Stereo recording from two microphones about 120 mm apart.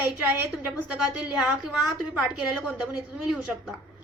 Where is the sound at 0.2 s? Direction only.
15° right (ahead or behind).